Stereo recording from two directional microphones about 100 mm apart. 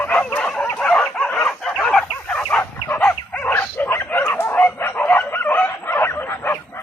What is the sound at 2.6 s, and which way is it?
Dog, 20° left (ahead or behind).